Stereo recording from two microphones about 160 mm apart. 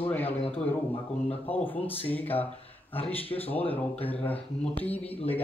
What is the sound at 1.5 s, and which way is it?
Speech, 10° left (ahead or behind).